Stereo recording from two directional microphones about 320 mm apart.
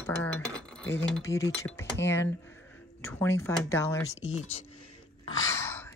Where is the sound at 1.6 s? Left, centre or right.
Centre.